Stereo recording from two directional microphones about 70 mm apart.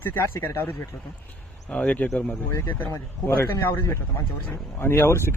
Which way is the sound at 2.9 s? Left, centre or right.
Left.